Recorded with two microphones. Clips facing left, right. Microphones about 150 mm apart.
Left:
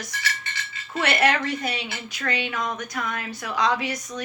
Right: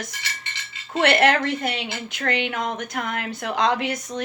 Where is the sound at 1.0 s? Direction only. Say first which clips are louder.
Right 4 dB; 55° right (ahead or behind).